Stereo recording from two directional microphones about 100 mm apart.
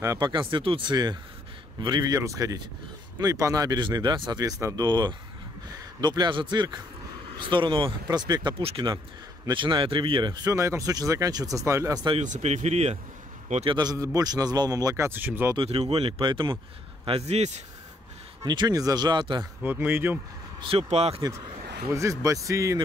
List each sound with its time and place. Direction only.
0.2 s speech: 55° right (ahead or behind); by 4.8 s 35° right (ahead or behind)
4.8 s speech: 50° right (ahead or behind)
10.3 s speech: 35° right (ahead or behind)
12.4 s speech: 90° right
13.7 s speech: 35° right (ahead or behind)
15.0 s speech: 20° right (ahead or behind)
15.5 s speech: 80° right; by 17.4 s 60° right (ahead or behind)
18.4 s speech: 45° right (ahead or behind)
19.6 s speech: 20° right (ahead or behind)
20.6 s speech: 85° right
21.9 s speech: 30° right (ahead or behind)